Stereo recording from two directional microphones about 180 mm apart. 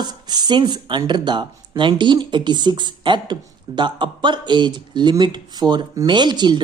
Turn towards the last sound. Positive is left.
turn(degrees=-25)  # may be behind; listen again after turning